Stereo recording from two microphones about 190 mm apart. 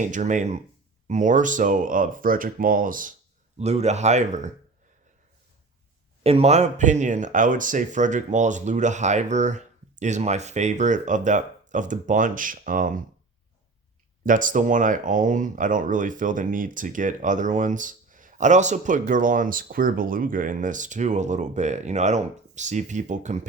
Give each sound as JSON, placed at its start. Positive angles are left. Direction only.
{"t": 0.0, "sound": "speech", "side_deg": -40}
{"t": 6.2, "sound": "speech", "side_deg": -35}
{"t": 14.3, "sound": "speech", "side_deg": -45}